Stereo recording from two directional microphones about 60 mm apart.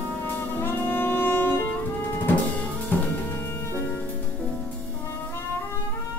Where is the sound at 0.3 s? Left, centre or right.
Left.